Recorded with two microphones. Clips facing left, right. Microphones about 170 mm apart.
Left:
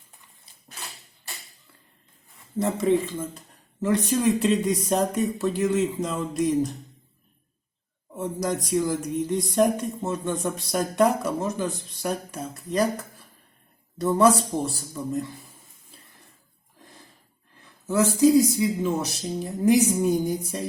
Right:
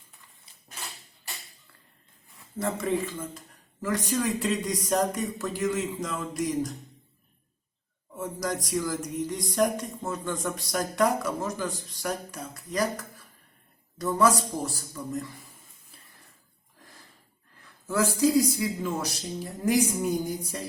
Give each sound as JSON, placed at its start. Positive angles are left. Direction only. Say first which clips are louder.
{"t": 2.6, "sound": "speech", "louder": "left 6 dB", "side_deg": 25}
{"t": 8.1, "sound": "speech", "louder": "left 4 dB", "side_deg": 20}
{"t": 14.0, "sound": "speech", "louder": "left 4 dB", "side_deg": 25}
{"t": 17.6, "sound": "a man's voice", "louder": "left 4 dB", "side_deg": 20}